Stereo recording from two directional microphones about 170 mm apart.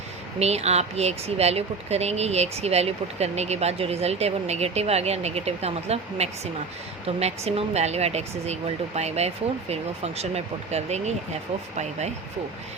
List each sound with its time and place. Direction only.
0.3 s speech: 40° right (ahead or behind)